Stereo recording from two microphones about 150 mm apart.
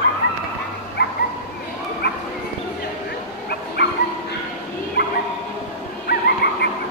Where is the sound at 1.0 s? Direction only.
90° left.